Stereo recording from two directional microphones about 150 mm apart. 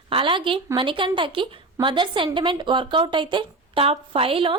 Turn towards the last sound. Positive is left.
turn(degrees=-40)  # may be behind; listen again after turning